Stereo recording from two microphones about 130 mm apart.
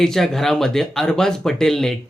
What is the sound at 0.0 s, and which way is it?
Speech, 5° left (ahead or behind).